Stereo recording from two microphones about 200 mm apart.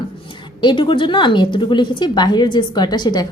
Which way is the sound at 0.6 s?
25° left (ahead or behind).